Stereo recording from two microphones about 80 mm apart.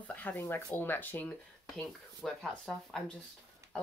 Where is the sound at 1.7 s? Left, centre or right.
Centre.